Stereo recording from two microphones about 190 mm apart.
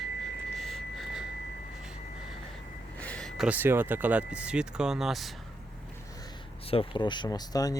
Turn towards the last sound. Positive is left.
turn(degrees=20)  # may be behind; listen again after turning